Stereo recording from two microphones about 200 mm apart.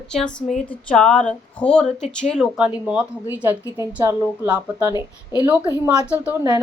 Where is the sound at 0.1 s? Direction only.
5° left (ahead or behind); by 5.0 s 10° right (ahead or behind).